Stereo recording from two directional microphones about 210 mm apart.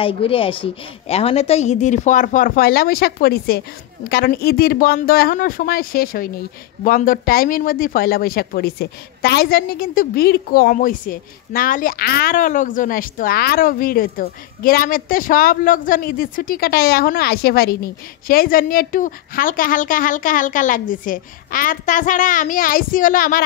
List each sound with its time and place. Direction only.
0.0 s a woman's voice: 25° left (ahead or behind); by 23.4 s 40° left (ahead or behind)